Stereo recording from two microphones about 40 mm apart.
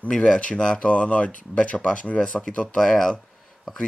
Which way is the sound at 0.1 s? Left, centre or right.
Left.